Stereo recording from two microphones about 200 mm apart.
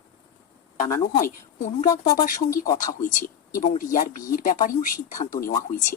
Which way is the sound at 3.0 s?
40° left (ahead or behind).